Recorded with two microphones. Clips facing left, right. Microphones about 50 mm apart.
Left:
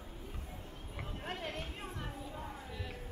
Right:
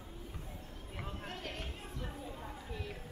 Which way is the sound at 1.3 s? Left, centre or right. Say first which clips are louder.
Left 7 dB; centre.